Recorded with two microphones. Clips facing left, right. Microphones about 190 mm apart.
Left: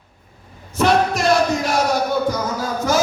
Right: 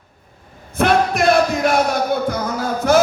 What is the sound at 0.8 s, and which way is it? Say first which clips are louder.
Music: right 1 dB; 55° right (ahead or behind).